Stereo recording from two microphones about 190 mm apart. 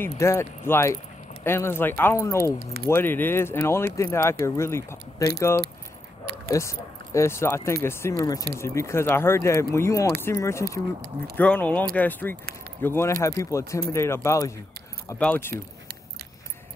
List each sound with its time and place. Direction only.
0.0 s speech: 15° left (ahead or behind)
6.5 s speech: 15° left (ahead or behind)